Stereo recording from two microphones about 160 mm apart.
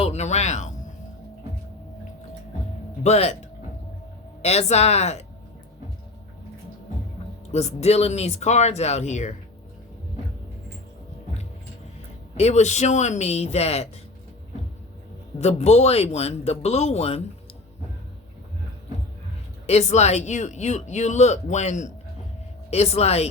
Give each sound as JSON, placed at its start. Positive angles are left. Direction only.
{"t": 0.0, "sound": "speech", "side_deg": 45}
{"t": 3.0, "sound": "speech", "side_deg": 40}
{"t": 4.4, "sound": "speech", "side_deg": 40}
{"t": 7.5, "sound": "speech", "side_deg": 45}
{"t": 12.3, "sound": "speech", "side_deg": 45}
{"t": 15.4, "sound": "speech", "side_deg": 40}
{"t": 19.6, "sound": "speech", "side_deg": 45}